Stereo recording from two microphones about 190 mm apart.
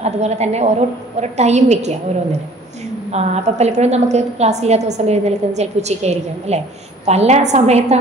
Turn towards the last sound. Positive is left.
turn(degrees=-35)  # may be behind; listen again after turning